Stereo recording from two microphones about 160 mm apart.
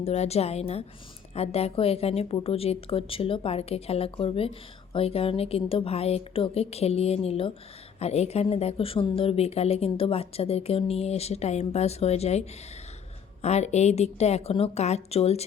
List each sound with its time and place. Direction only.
0.0 s speech: 40° left (ahead or behind)